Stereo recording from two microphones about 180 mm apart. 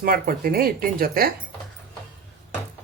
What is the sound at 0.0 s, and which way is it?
Speech, 55° right (ahead or behind).